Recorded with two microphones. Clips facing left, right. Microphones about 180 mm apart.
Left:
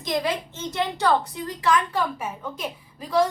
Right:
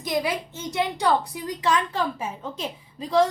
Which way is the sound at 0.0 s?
10° right (ahead or behind).